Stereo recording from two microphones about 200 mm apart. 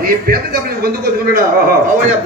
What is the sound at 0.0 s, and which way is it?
A man's voice, 45° right (ahead or behind).